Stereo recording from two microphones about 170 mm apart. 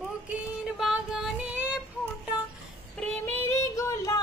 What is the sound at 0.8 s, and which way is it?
Child singing, 5° right (ahead or behind).